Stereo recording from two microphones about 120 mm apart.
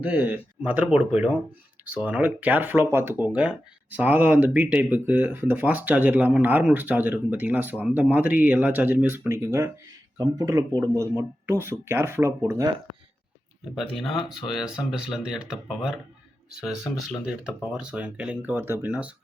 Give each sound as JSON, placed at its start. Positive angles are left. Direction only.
{"t": 0.0, "sound": "speech", "side_deg": -15}
{"t": 13.7, "sound": "speech", "side_deg": 0}
{"t": 17.2, "sound": "speech", "side_deg": -5}